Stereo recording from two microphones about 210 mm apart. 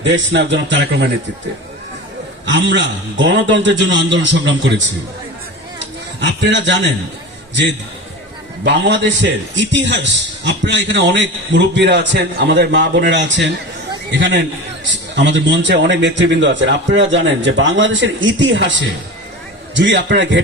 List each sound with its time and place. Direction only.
0.0 s a man's voice: 60° right (ahead or behind)
2.5 s a man's voice: 55° right (ahead or behind)
6.1 s a man's voice: 55° right (ahead or behind)
8.6 s a man's voice: 55° right (ahead or behind)